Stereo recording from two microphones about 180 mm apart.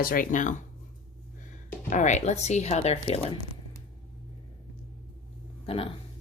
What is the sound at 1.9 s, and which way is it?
Speech, 40° left (ahead or behind).